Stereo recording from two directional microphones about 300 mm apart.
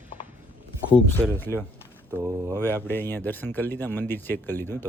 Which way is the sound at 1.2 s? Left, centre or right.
Centre.